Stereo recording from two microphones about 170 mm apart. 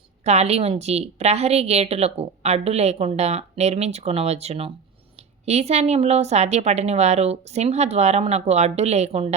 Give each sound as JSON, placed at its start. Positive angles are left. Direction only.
{"t": 0.3, "sound": "a woman's voice", "side_deg": -40}